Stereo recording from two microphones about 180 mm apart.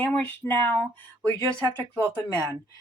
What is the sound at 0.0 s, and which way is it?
Speech, 10° left (ahead or behind).